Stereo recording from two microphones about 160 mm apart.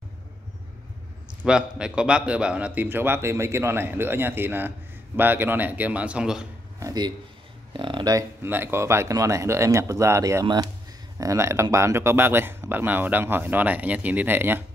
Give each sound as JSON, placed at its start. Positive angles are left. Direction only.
{"t": 1.4, "sound": "a man's voice", "side_deg": -5}
{"t": 6.8, "sound": "a man's voice", "side_deg": -20}